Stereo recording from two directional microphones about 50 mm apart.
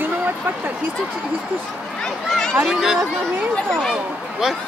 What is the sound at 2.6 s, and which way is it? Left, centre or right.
Speech, centre.